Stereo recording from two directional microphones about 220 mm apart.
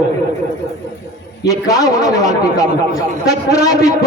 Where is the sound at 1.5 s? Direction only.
15° left (ahead or behind).